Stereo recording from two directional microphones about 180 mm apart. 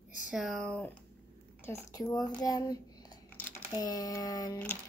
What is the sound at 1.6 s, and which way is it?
A woman's voice, 15° left (ahead or behind).